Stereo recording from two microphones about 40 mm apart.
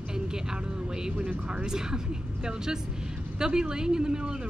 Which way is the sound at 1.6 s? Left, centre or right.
Centre.